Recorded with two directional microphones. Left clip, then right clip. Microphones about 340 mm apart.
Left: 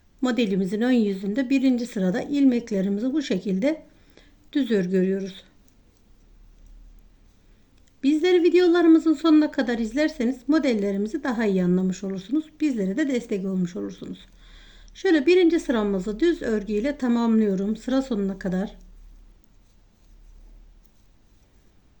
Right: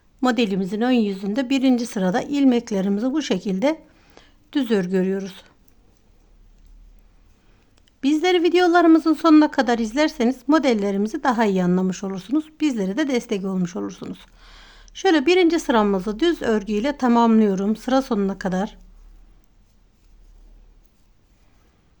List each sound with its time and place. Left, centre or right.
0.2 s speech: centre
8.0 s speech: centre
14.0 s a sound: centre
14.8 s a sound: right
15.0 s speech: centre
16.0 s speech: right
16.7 s speech: centre